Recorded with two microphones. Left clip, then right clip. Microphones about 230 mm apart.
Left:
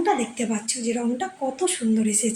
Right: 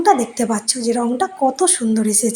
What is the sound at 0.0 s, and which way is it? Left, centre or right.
A woman's voice, right.